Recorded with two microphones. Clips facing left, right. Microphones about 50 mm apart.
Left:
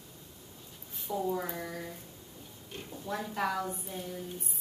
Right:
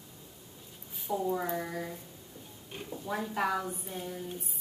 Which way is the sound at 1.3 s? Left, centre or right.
Centre.